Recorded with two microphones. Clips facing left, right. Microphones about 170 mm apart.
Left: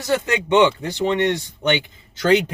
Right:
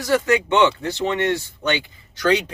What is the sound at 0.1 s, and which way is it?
Speech, 15° left (ahead or behind).